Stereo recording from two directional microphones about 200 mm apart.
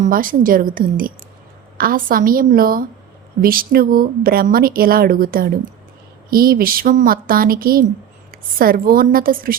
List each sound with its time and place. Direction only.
0.0 s a woman's voice: 45° right (ahead or behind)